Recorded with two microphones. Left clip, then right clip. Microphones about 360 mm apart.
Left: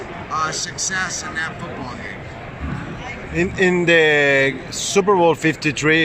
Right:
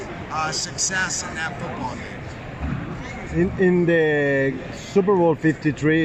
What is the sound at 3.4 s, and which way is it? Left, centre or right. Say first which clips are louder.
Speech: left 2 dB; left.